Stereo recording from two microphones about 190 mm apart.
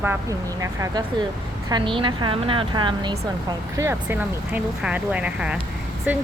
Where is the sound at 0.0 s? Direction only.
15° right (ahead or behind).